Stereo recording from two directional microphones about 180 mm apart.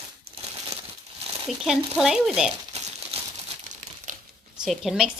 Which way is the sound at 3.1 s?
35° right (ahead or behind).